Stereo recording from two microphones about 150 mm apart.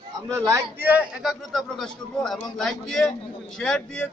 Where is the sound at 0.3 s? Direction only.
20° right (ahead or behind).